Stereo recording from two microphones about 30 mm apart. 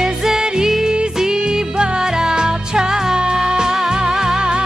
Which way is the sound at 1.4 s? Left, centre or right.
Right.